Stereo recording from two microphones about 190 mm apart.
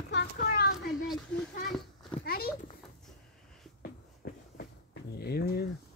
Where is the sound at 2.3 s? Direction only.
50° left (ahead or behind).